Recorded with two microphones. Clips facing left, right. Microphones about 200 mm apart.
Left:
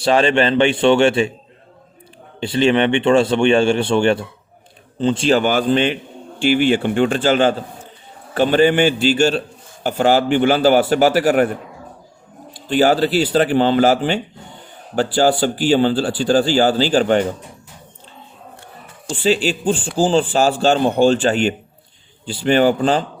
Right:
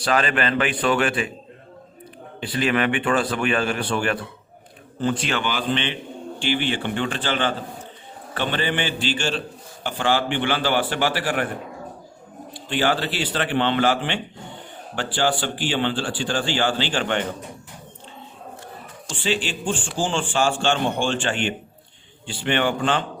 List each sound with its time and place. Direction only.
0.0 s speech: 25° left (ahead or behind)
2.4 s speech: 25° left (ahead or behind)
5.4 s a man's voice: 45° left (ahead or behind)
12.5 s speech: 40° left (ahead or behind)
19.0 s speech: 40° left (ahead or behind)